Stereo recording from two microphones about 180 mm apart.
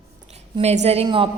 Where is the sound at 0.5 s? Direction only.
40° right (ahead or behind).